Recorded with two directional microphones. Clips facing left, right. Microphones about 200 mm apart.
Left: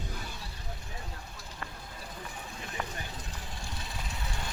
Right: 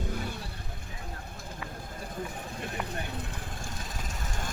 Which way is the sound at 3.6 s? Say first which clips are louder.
Right 2 dB; 45° right (ahead or behind).